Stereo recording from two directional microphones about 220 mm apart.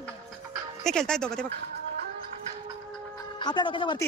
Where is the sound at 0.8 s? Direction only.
5° left (ahead or behind).